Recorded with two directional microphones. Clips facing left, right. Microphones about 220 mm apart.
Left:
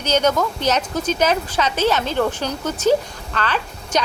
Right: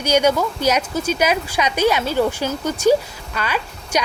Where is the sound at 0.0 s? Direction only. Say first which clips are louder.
Right 2 dB; 10° right (ahead or behind).